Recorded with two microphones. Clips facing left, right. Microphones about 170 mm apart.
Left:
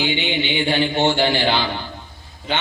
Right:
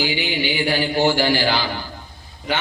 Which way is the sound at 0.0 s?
20° left (ahead or behind).